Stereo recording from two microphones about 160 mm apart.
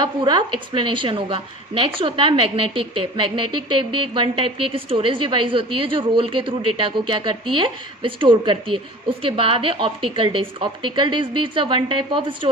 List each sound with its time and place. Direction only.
0.0 s speech: 30° right (ahead or behind)